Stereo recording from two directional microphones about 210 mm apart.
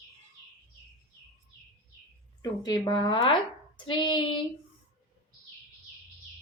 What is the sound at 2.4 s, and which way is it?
Speech, 20° left (ahead or behind).